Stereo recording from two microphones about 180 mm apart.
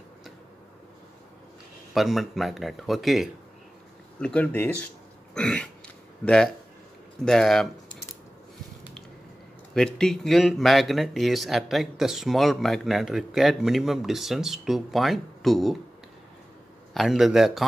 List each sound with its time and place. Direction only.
2.0 s speech: centre (ahead or behind)
9.8 s speech: 5° left (ahead or behind)
16.9 s speech: centre (ahead or behind)